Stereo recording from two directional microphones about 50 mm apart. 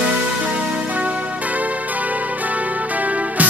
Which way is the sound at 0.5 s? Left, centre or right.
Right.